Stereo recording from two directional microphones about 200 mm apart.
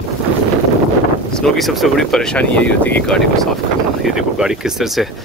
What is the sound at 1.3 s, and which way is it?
Speech, centre (ahead or behind).